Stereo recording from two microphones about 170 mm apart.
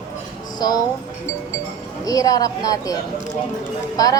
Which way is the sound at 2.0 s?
20° left (ahead or behind).